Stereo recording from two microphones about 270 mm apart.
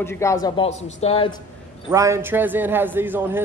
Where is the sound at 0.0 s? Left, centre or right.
Centre.